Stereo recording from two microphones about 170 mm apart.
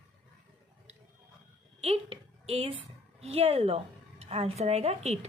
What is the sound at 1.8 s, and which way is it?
A woman's voice, 35° right (ahead or behind).